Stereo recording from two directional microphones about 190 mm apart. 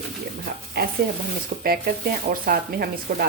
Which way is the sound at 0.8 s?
50° right (ahead or behind).